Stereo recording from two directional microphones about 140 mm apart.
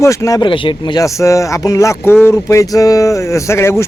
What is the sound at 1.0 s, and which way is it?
Speech, 20° left (ahead or behind).